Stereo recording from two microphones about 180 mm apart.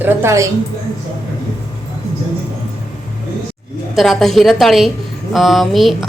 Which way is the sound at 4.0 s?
Centre (ahead or behind).